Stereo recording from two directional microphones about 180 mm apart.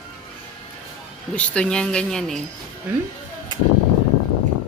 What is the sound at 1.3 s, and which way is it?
Speech, 5° left (ahead or behind).